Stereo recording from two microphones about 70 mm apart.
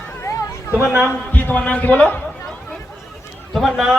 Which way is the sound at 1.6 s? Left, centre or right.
Centre.